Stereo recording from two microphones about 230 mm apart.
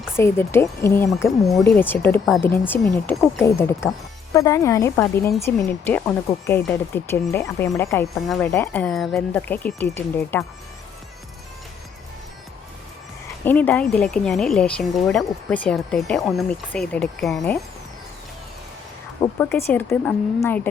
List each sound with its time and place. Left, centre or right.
0.2 s speech: centre
13.4 s a woman's voice: centre
19.2 s speech: centre